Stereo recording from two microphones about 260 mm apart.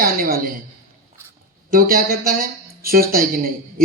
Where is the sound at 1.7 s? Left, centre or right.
Right.